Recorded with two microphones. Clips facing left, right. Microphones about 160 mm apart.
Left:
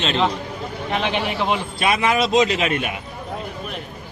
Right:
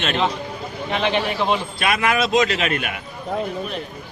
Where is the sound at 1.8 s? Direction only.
20° left (ahead or behind).